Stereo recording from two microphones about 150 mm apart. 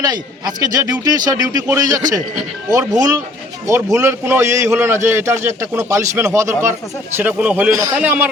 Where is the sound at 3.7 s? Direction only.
20° right (ahead or behind).